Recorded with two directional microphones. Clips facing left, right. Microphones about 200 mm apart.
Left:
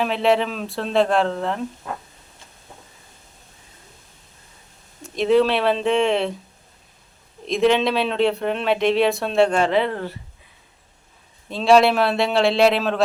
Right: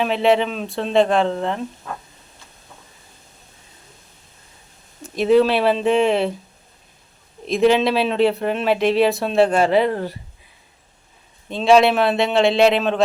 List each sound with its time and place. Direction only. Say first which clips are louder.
0.0 s speech: right 2 dB; centre (ahead or behind)
5.0 s speech: right 2 dB; 5° right (ahead or behind)
7.4 s speech: right 2 dB; 5° right (ahead or behind)
9.9 s speech: right 3 dB; 40° right (ahead or behind)
11.4 s speech: right 1 dB; centre (ahead or behind)